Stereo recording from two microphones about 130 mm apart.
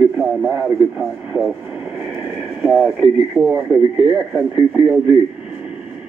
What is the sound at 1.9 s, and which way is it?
Radio, 10° right (ahead or behind).